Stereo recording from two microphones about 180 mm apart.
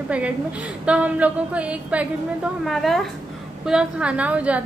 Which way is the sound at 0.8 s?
5° right (ahead or behind).